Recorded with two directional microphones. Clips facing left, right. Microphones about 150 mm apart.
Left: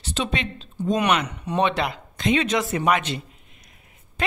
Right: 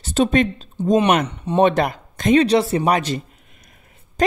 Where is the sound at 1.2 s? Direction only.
30° right (ahead or behind).